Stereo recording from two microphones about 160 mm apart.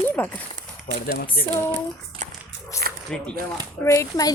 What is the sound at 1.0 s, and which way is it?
Speech, 70° left (ahead or behind).